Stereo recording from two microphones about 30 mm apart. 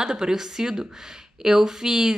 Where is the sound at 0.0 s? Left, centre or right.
Right.